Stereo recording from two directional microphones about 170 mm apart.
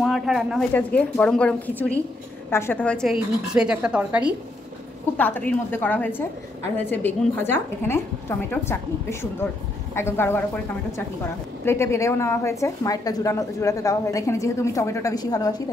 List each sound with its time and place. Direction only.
0.0 s a woman's voice: centre (ahead or behind)
5.1 s a woman's voice: 10° left (ahead or behind)
11.6 s a woman's voice: 15° left (ahead or behind)